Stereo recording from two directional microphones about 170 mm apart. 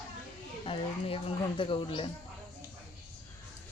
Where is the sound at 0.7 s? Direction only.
35° left (ahead or behind).